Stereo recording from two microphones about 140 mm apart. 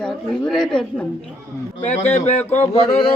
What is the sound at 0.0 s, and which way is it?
Speech, 5° left (ahead or behind).